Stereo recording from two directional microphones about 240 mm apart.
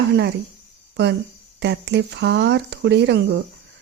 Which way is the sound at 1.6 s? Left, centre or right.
Right.